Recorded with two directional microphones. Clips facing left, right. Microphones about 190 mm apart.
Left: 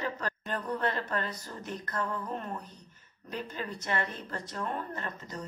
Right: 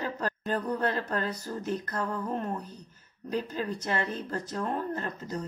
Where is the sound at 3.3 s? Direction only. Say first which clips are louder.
Right 6 dB; 35° right (ahead or behind).